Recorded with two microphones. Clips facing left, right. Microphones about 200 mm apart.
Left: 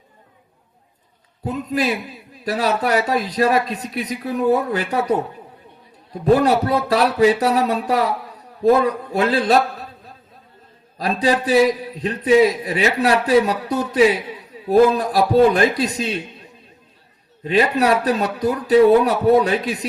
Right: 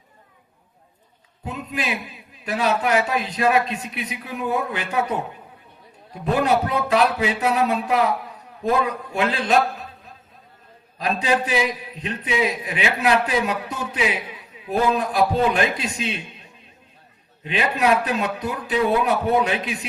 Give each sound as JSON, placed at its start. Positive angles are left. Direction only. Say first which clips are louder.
{"t": 1.5, "sound": "speech", "louder": "left 7 dB", "side_deg": 35}
{"t": 6.2, "sound": "speech", "louder": "left 5 dB", "side_deg": 35}
{"t": 10.9, "sound": "speech", "louder": "left 3 dB", "side_deg": 35}
{"t": 17.4, "sound": "speech", "louder": "left 5 dB", "side_deg": 40}